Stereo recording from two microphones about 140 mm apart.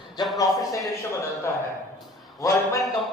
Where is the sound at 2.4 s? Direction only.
25° left (ahead or behind).